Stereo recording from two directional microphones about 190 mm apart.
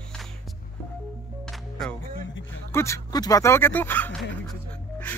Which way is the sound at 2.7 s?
15° left (ahead or behind).